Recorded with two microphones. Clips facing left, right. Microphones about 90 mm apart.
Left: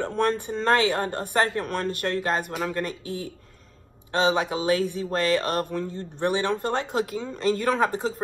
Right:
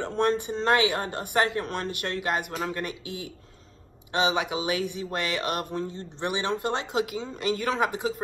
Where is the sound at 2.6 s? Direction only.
15° right (ahead or behind).